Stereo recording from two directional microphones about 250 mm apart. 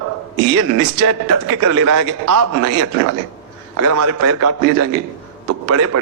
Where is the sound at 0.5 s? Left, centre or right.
Right.